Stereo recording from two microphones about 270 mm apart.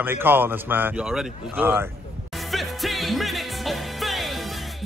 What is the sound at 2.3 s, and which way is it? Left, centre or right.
Music, centre.